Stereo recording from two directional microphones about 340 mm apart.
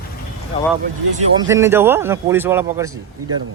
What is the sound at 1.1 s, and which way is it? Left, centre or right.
Speech, centre.